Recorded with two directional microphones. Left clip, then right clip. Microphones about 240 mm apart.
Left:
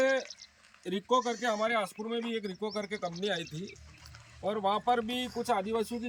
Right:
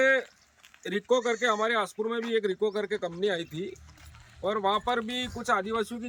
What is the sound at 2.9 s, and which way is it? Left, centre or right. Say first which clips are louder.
Speech: right 5 dB; right.